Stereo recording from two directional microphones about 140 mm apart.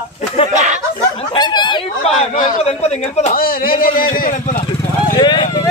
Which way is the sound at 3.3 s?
90° left.